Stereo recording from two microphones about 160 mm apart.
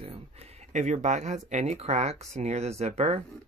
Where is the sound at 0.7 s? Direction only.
50° right (ahead or behind).